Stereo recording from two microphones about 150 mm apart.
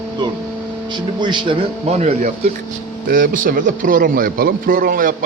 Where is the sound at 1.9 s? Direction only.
45° right (ahead or behind).